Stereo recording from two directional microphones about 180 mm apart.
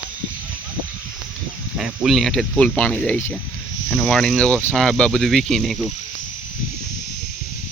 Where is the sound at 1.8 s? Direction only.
Centre (ahead or behind).